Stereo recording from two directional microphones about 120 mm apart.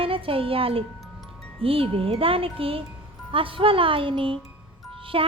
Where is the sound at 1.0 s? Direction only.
Centre (ahead or behind).